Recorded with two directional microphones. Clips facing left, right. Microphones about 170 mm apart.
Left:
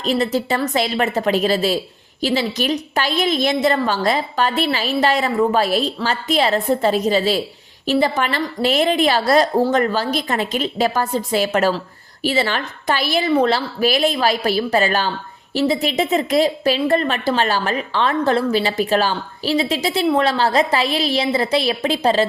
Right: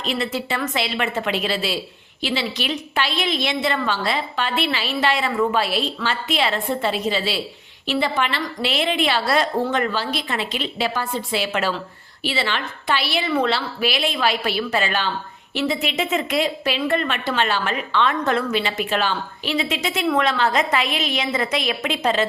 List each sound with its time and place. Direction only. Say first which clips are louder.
0.0 s a woman's voice: left 6 dB; 40° left (ahead or behind)